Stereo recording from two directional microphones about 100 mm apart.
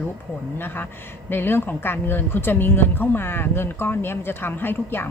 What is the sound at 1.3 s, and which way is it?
A woman's voice, 20° left (ahead or behind).